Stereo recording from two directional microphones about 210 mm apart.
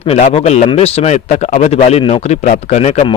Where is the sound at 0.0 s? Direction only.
30° left (ahead or behind).